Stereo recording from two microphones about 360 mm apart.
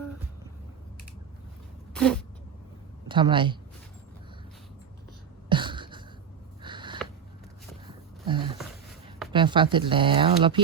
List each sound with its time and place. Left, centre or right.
1.9 s cat: centre
3.1 s speech: centre
5.5 s a sound: centre
9.3 s speech: centre